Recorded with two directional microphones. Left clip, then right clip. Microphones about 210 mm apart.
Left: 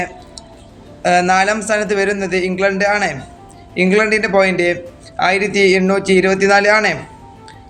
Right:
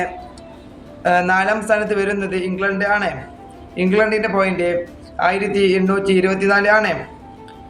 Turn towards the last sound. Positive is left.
turn(degrees=40)  # may be behind; listen again after turning